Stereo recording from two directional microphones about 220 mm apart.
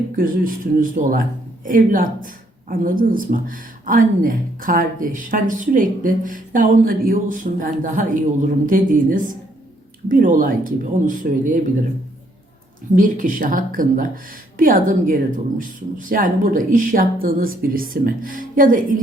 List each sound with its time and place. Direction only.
0.2 s speech: 40° right (ahead or behind)
13.0 s speech: 35° right (ahead or behind)